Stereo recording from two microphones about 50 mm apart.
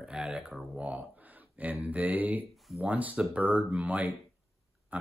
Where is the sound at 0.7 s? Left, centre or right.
Right.